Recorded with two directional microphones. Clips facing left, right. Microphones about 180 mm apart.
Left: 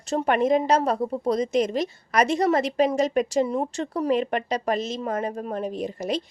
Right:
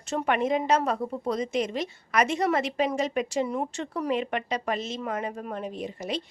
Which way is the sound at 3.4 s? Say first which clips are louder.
Left 4 dB; 30° left (ahead or behind).